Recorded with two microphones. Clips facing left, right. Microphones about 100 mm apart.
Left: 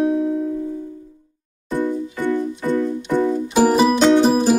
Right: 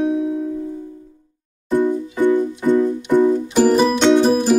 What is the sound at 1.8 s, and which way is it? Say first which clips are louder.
Music: right 4 dB; 15° right (ahead or behind).